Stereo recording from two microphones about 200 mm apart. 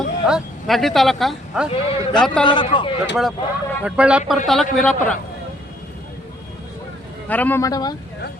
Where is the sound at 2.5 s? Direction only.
25° left (ahead or behind).